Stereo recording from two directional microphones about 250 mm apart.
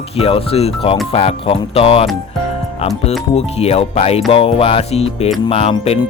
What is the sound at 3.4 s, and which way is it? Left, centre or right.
Speech, left.